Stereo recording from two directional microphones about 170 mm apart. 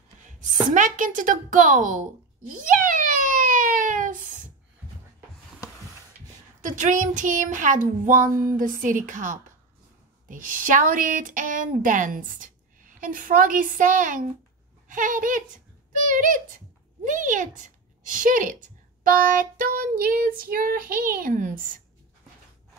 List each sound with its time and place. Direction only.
0.7 s speech: 50° right (ahead or behind)
2.5 s a sound: 50° right (ahead or behind)
6.6 s a child's voice: 50° right (ahead or behind)
19.0 s child singing: 55° right (ahead or behind)